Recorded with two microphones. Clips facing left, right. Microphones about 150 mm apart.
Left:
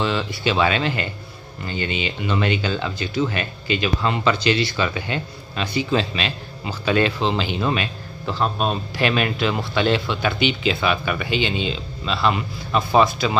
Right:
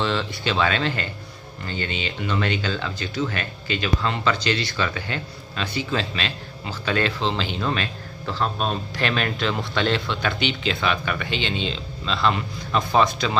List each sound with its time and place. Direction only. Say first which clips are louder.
0.0 s speech: left 2 dB; 5° left (ahead or behind)